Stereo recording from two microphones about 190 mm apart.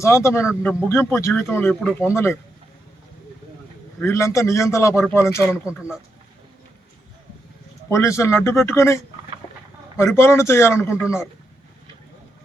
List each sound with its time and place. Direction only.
0.0 s speech: 15° left (ahead or behind)
4.0 s speech: 15° left (ahead or behind)
7.9 s speech: 15° left (ahead or behind)
10.0 s speech: 15° left (ahead or behind)